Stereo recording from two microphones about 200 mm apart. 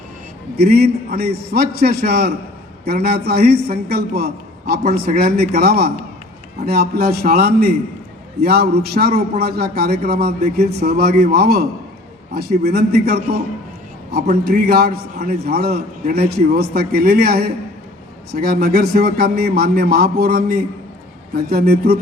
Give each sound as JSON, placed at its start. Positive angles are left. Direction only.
{"t": 0.5, "sound": "a man's voice", "side_deg": -50}